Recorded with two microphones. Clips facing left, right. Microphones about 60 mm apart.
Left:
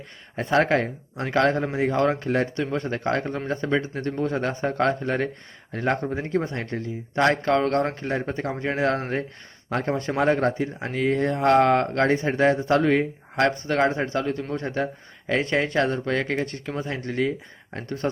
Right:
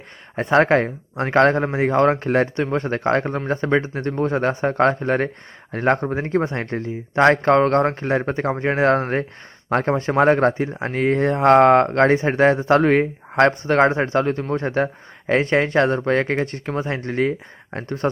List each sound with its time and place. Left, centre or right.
0.3 s speech: right
17.8 s speech: right